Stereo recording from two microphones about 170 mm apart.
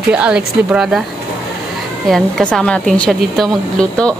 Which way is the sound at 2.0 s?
Centre (ahead or behind).